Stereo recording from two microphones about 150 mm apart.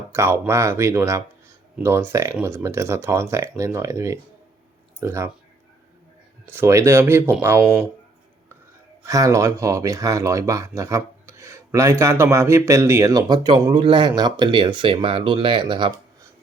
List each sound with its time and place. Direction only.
0.1 s speech: 20° right (ahead or behind)
6.4 s speech: 15° right (ahead or behind)
7.6 s speech: 5° right (ahead or behind)
9.0 s speech: 20° right (ahead or behind)